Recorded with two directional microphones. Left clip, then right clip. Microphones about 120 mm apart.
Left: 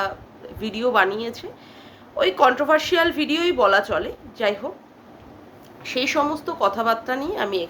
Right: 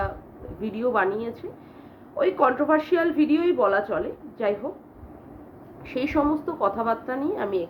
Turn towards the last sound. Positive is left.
turn(degrees=15)  # may be behind; listen again after turning